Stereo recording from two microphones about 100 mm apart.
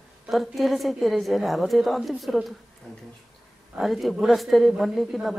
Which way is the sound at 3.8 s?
Centre (ahead or behind).